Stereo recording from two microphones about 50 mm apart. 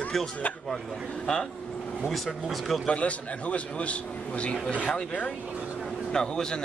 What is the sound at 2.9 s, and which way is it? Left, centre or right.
Speech, left.